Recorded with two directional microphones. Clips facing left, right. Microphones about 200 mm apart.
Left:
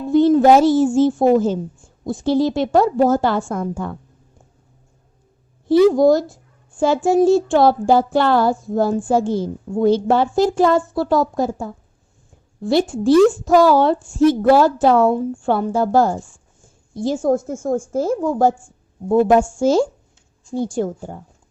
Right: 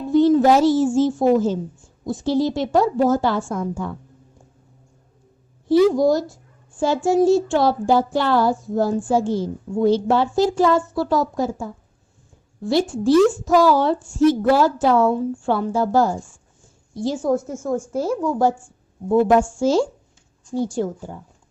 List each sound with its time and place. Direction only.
0.1 s a sound: 55° left (ahead or behind)
0.5 s a woman's voice: 55° left (ahead or behind)
2.0 s child singing: 55° left (ahead or behind)
6.0 s child singing: 55° left (ahead or behind)
12.6 s child singing: 55° left (ahead or behind)
16.9 s a woman's voice: 50° left (ahead or behind)
19.0 s a woman's voice: 25° left (ahead or behind)
19.5 s a woman's voice: 50° left (ahead or behind)